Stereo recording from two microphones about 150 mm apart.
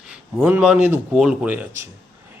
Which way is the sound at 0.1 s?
10° right (ahead or behind).